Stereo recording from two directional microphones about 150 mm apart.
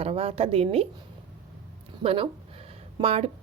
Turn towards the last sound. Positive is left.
turn(degrees=-40)  # may be behind; listen again after turning